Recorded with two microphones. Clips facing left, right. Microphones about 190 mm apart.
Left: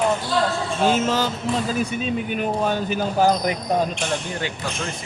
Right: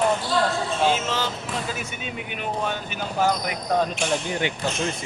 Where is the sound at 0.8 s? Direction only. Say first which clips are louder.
Left 6 dB; 45° left (ahead or behind).